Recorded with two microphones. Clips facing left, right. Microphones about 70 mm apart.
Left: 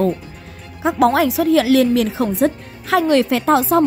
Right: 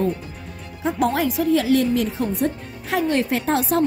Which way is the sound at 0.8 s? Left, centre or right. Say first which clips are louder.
Left 6 dB; left.